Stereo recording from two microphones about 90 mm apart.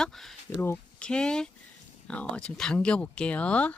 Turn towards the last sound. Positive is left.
turn(degrees=15)  # may be behind; listen again after turning